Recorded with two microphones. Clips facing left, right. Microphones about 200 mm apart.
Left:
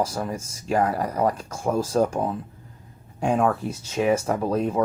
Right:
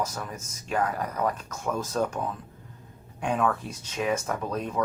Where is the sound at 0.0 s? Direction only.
30° left (ahead or behind).